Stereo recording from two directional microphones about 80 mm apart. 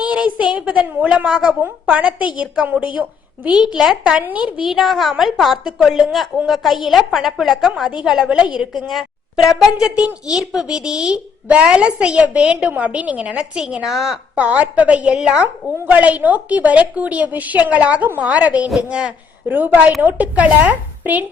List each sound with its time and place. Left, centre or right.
0.0 s a child's voice: centre
3.6 s a child's voice: centre
4.2 s a woman's voice: centre
9.7 s a child's voice: centre
14.3 s a child's voice: centre